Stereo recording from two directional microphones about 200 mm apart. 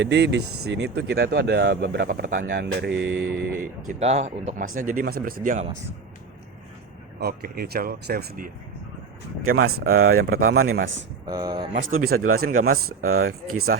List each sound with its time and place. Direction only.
0.0 s speech: 60° right (ahead or behind)
3.8 s speech: 35° right (ahead or behind)
7.2 s speech: 50° right (ahead or behind)
9.4 s speech: 90° right
11.3 s speech: 20° right (ahead or behind)
12.1 s speech: 90° right
12.4 s speech: 45° right (ahead or behind)
13.0 s speech: 90° right